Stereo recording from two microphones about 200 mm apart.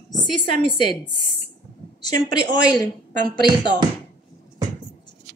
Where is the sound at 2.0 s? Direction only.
20° left (ahead or behind).